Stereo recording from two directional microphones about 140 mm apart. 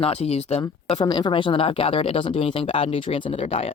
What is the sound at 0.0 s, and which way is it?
Speech, 45° left (ahead or behind).